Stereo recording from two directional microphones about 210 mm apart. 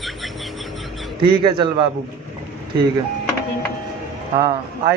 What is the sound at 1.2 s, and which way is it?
Speech, 25° right (ahead or behind).